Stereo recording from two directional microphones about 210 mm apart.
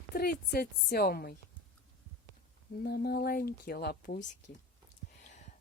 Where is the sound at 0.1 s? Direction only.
45° left (ahead or behind).